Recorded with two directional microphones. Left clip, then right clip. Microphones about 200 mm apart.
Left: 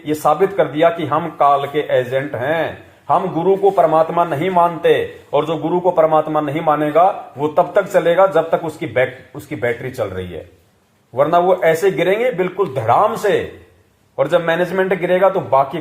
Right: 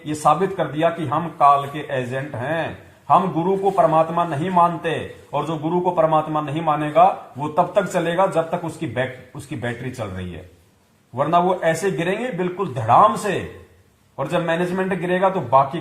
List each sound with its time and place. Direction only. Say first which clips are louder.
0.0 s a man's voice: left 3 dB; 35° left (ahead or behind)
11.2 s a man's voice: left 5 dB; 30° left (ahead or behind)